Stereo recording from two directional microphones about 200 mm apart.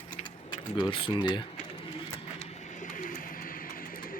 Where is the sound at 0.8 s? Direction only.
25° left (ahead or behind).